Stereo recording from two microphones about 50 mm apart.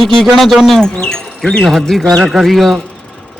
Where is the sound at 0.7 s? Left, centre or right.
Centre.